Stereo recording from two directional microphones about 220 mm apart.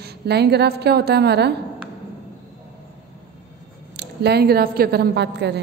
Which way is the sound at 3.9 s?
50° right (ahead or behind).